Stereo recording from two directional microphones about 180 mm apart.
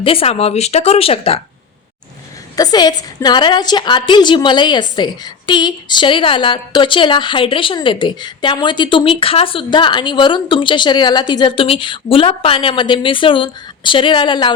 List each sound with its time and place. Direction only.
0.0 s speech: 30° left (ahead or behind)
2.6 s a woman's voice: 20° left (ahead or behind)